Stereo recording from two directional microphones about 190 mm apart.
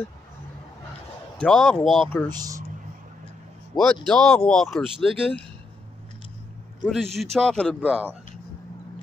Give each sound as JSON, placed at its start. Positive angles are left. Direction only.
{"t": 1.4, "sound": "speech", "side_deg": 5}
{"t": 2.3, "sound": "speech", "side_deg": -20}
{"t": 3.7, "sound": "speech", "side_deg": 5}
{"t": 6.8, "sound": "speech", "side_deg": 0}
{"t": 7.8, "sound": "speech", "side_deg": -10}